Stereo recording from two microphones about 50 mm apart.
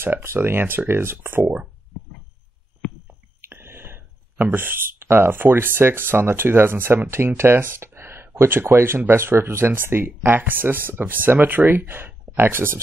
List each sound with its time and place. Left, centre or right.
0.0 s speech: right
3.4 s speech: right